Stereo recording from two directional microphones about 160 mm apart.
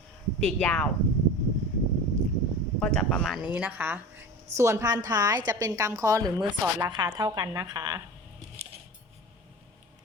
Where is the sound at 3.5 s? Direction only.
10° right (ahead or behind).